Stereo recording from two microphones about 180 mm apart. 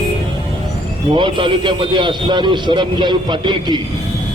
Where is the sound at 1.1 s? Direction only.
25° right (ahead or behind).